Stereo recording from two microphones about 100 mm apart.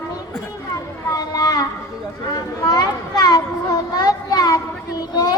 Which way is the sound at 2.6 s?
40° left (ahead or behind).